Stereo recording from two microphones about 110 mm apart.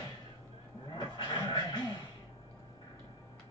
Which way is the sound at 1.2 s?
40° left (ahead or behind).